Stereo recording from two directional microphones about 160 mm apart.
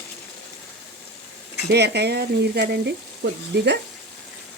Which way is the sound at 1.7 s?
90° right.